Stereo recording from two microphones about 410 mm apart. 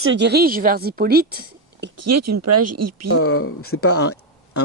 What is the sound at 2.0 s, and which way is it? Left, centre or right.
Speech, right.